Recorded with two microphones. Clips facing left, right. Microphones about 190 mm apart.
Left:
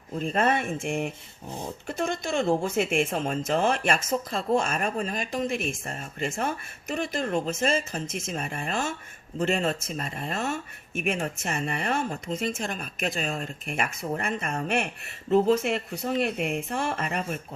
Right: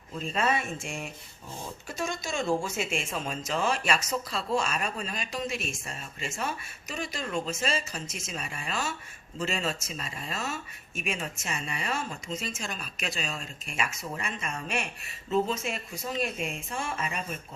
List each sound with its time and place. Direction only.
0.1 s speech: 55° left (ahead or behind)